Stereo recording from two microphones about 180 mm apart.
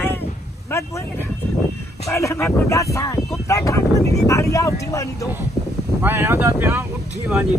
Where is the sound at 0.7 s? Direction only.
15° left (ahead or behind).